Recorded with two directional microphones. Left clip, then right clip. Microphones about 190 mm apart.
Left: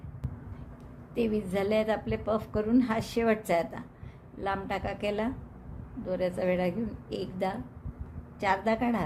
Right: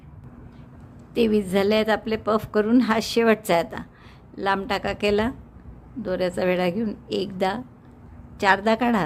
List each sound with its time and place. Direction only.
1.1 s a woman's voice: 40° right (ahead or behind)